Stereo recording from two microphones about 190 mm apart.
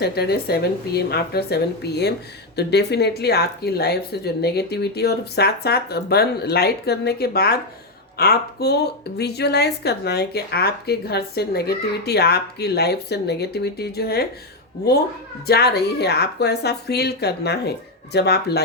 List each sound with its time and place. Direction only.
0.0 s speech: 55° left (ahead or behind)
15.4 s speech: 55° left (ahead or behind)